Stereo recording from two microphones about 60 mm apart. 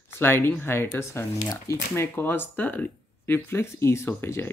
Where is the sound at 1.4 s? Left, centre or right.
Left.